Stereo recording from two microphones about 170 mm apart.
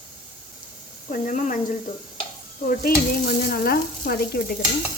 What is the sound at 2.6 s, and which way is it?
Speech, 55° left (ahead or behind).